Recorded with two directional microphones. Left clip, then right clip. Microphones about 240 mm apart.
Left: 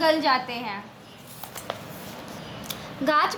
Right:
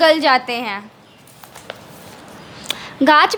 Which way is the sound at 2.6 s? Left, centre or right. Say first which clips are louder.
Right 12 dB; right.